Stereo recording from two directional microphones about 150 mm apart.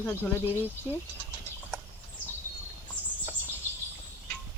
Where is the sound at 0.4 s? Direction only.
15° right (ahead or behind).